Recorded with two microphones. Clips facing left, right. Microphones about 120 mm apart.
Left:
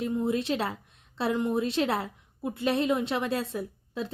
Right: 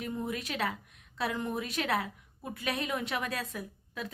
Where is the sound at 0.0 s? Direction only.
25° left (ahead or behind).